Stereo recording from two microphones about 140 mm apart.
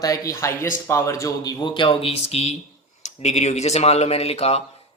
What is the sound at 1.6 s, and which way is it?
Speech, 35° left (ahead or behind).